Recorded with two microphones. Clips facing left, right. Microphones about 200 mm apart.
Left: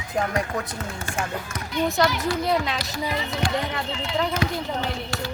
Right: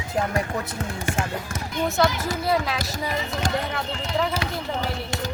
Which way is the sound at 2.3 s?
5° right (ahead or behind).